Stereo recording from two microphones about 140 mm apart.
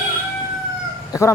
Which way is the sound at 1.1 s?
20° left (ahead or behind).